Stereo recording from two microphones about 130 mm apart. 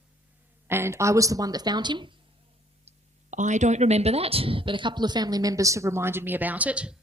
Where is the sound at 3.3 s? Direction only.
70° right (ahead or behind).